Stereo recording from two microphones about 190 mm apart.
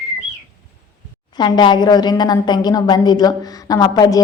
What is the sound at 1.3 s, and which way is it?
A woman's voice, 25° left (ahead or behind).